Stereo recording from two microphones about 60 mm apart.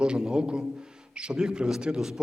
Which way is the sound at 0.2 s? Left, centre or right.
Centre.